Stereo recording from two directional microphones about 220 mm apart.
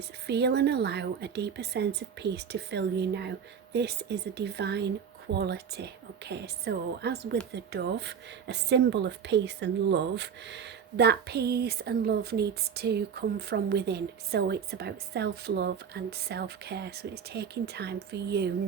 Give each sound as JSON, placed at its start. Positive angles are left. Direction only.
{"t": 0.3, "sound": "a woman's voice", "side_deg": -50}